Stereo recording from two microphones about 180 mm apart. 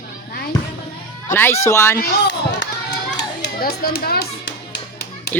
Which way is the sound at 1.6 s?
15° left (ahead or behind).